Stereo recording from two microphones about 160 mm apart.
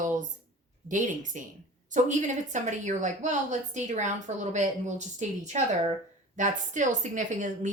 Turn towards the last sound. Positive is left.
turn(degrees=-50)  # may be behind; listen again after turning